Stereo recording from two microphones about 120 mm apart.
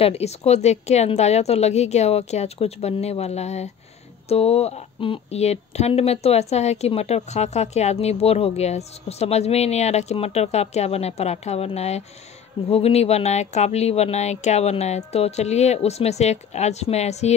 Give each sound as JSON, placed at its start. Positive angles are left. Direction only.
{"t": 0.0, "sound": "speech", "side_deg": 60}